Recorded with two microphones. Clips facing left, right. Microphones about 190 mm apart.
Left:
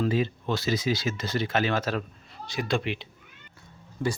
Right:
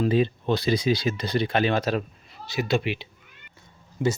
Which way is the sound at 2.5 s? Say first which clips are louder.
Right 3 dB; 5° right (ahead or behind).